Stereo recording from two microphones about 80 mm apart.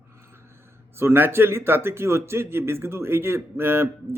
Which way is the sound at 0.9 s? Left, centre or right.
Right.